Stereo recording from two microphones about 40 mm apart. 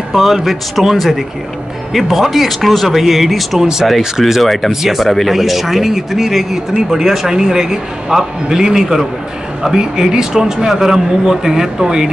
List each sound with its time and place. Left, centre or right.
0.1 s speech: centre
3.5 s speech: centre
4.2 s speech: centre